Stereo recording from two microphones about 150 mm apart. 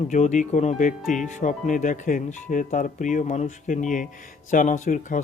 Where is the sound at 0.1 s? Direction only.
55° left (ahead or behind).